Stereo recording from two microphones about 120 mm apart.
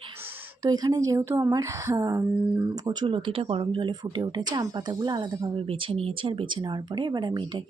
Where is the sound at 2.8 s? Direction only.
40° right (ahead or behind).